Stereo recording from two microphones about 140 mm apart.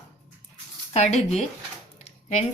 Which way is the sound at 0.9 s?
50° left (ahead or behind).